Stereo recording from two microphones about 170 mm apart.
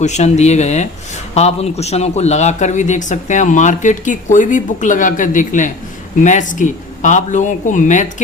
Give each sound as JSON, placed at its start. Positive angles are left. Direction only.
{"t": 0.0, "sound": "a man's voice", "side_deg": 45}